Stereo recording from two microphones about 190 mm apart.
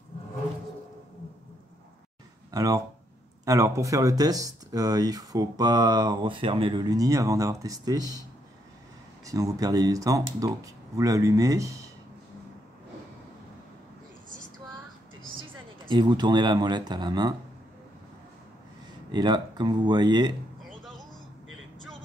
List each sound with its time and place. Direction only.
2.5 s speech: 20° right (ahead or behind)
9.2 s speech: 20° right (ahead or behind)
15.9 s speech: 25° right (ahead or behind)
19.1 s speech: 20° right (ahead or behind)
20.6 s a sound: centre (ahead or behind)